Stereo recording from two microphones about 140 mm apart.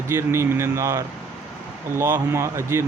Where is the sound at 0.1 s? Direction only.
20° right (ahead or behind).